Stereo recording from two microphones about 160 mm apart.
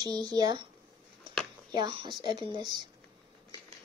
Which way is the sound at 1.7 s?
30° right (ahead or behind).